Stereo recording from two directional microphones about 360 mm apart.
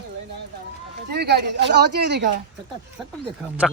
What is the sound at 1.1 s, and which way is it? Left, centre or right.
Speech, right.